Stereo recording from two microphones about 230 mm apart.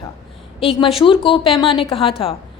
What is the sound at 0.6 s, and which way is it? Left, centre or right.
A woman's voice, left.